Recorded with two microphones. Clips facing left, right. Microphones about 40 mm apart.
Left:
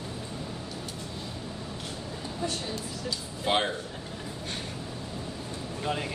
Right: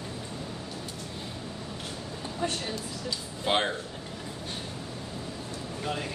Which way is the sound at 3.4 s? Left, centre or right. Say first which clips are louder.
Even; centre.